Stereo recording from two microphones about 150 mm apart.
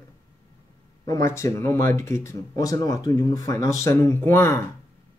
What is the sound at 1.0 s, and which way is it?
Speech, 20° left (ahead or behind).